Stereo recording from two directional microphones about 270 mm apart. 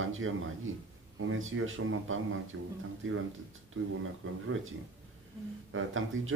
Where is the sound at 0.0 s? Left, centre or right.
Right.